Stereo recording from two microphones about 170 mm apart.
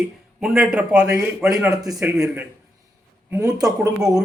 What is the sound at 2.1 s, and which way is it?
Speech, 20° right (ahead or behind).